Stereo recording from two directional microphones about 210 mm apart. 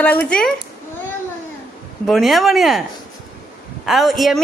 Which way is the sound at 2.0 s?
Centre (ahead or behind).